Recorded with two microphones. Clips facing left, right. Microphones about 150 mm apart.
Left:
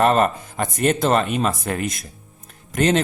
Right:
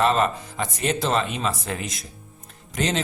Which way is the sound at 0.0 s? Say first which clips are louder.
Left 4 dB; 50° left (ahead or behind).